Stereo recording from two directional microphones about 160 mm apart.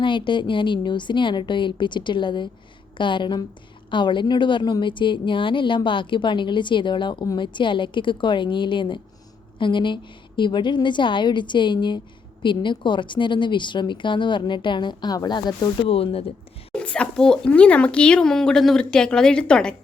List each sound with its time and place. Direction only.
0.0 s a woman's voice: 30° left (ahead or behind)
16.7 s speech: 5° left (ahead or behind)